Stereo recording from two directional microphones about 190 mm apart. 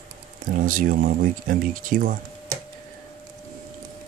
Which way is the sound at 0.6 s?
45° right (ahead or behind).